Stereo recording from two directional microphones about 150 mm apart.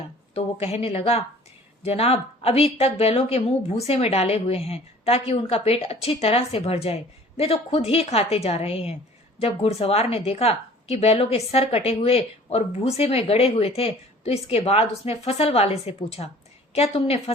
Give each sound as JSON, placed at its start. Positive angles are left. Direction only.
{"t": 0.3, "sound": "a woman's voice", "side_deg": 45}